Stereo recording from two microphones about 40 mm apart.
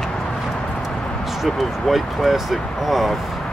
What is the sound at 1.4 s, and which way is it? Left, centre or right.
Speech, centre.